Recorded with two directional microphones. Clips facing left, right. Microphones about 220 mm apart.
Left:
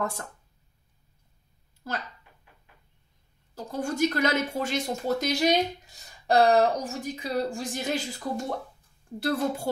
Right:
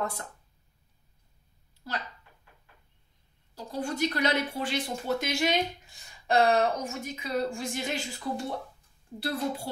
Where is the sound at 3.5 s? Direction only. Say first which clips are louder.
Left 3 dB; 45° left (ahead or behind).